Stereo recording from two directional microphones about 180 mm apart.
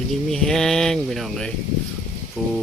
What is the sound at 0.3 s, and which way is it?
Speech, centre (ahead or behind).